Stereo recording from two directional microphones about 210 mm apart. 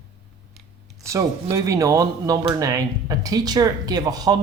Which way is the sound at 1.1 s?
15° right (ahead or behind).